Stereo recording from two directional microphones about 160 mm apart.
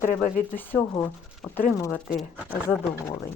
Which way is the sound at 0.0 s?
55° left (ahead or behind).